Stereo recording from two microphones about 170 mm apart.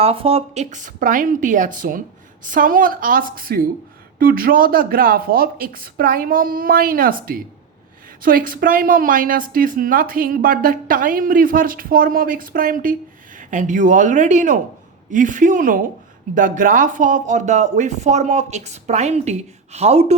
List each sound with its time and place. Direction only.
0.0 s a woman's voice: 35° right (ahead or behind)